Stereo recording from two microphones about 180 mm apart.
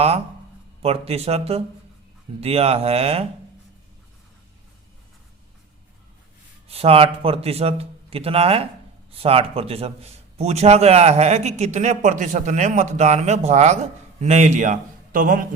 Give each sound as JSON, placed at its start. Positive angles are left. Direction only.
{"t": 0.8, "sound": "a man's voice", "side_deg": -35}
{"t": 6.7, "sound": "a man's voice", "side_deg": -35}